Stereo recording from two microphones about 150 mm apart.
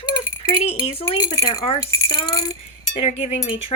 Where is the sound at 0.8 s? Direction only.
40° left (ahead or behind).